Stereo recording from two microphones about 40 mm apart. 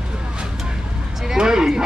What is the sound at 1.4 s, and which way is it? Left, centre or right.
Speech, centre.